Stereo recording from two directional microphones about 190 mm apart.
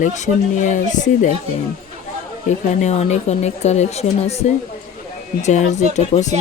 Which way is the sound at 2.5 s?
35° left (ahead or behind).